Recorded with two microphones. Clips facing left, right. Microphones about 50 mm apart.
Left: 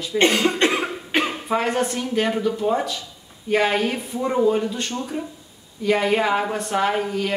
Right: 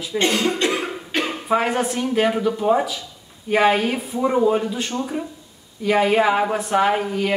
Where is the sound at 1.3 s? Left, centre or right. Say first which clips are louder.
Right 2 dB; centre.